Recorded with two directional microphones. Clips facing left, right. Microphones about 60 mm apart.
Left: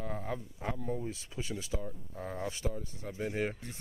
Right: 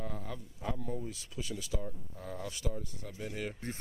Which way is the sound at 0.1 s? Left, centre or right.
Left.